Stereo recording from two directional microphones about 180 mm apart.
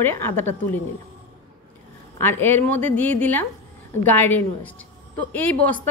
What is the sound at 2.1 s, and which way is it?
A woman's voice, 10° left (ahead or behind).